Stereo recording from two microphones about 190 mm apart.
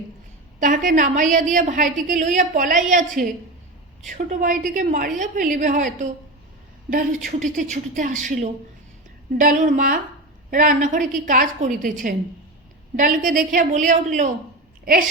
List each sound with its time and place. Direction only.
0.6 s a woman's voice: 45° right (ahead or behind)